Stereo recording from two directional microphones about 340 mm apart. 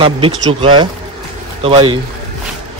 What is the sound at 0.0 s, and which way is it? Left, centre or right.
Speech, centre.